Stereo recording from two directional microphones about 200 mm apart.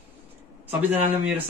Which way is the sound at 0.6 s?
10° right (ahead or behind).